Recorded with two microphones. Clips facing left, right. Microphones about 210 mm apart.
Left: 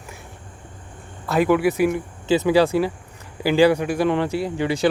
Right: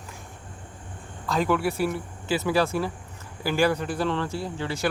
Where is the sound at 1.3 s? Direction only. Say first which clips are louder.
Left 6 dB; 10° left (ahead or behind).